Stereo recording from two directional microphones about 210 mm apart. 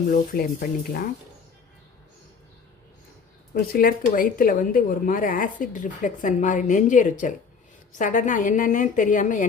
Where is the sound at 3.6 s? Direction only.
45° left (ahead or behind).